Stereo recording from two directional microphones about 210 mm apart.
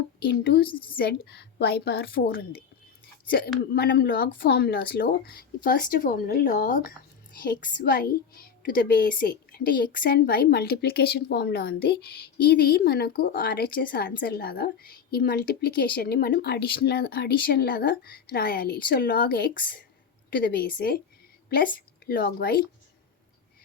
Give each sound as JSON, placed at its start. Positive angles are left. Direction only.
{"t": 0.3, "sound": "a woman's voice", "side_deg": 45}
{"t": 0.7, "sound": "a woman's voice", "side_deg": 25}
{"t": 0.9, "sound": "a woman's voice", "side_deg": 45}